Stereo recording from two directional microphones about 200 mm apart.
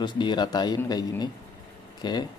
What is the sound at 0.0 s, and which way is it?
Speech, 20° left (ahead or behind).